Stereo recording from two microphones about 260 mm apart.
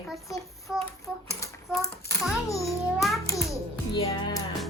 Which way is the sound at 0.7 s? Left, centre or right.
Centre.